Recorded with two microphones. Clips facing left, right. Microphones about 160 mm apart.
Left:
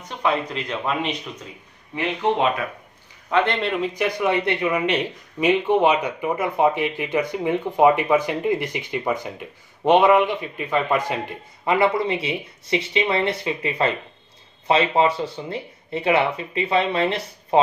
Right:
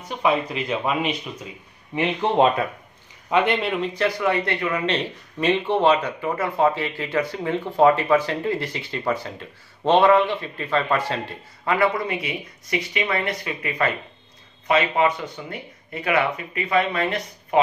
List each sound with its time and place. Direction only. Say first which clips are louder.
0.2 s speech: right 1 dB; 5° right (ahead or behind)
3.3 s speech: even; 15° right (ahead or behind)
3.6 s speech: left 1 dB; centre (ahead or behind)
3.9 s speech: right 1 dB; 15° left (ahead or behind)